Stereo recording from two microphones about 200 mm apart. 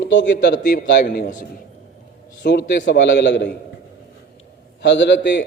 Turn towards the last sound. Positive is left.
turn(degrees=60)  # may be behind; listen again after turning